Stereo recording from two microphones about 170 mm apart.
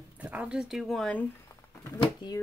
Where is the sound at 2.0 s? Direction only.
25° left (ahead or behind).